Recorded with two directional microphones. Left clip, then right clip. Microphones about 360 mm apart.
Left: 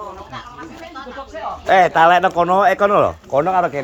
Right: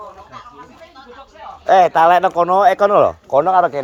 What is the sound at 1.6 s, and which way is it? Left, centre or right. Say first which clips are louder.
Speech: right 1 dB; centre.